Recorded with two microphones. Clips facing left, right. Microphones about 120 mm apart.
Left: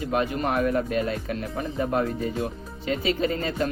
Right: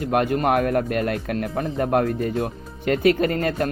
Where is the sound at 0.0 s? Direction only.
60° right (ahead or behind).